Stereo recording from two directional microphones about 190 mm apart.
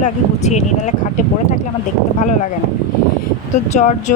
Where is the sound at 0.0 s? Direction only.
40° left (ahead or behind).